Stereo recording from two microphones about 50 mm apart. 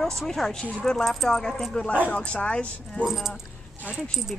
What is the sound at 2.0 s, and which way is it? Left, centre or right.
Speech, left.